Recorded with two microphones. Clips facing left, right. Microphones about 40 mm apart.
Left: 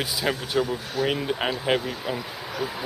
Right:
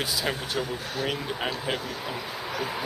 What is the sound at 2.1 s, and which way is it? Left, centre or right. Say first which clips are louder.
Speech: left 1 dB; centre.